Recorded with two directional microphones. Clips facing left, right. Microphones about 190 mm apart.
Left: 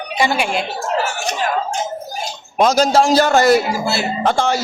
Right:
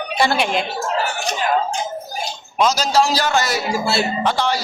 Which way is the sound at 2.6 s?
55° left (ahead or behind).